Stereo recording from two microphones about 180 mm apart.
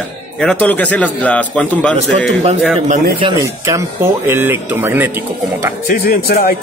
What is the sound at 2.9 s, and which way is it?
Speech, 30° right (ahead or behind).